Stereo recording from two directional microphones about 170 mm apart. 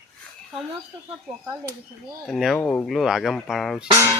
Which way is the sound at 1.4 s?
15° right (ahead or behind).